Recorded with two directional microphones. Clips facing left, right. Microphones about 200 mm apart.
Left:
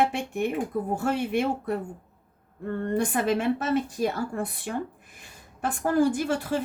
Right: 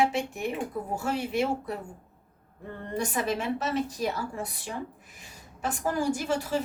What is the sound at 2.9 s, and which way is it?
A woman's voice, 55° left (ahead or behind).